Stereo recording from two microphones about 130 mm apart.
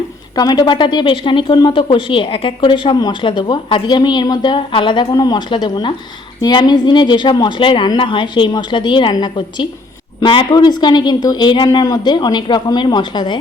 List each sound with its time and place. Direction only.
0.3 s a woman's voice: 30° left (ahead or behind)